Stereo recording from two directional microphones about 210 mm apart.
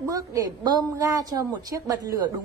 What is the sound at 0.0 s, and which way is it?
A woman's voice, 15° right (ahead or behind).